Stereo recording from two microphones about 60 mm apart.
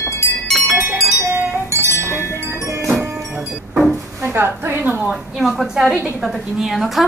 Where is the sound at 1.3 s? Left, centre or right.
Right.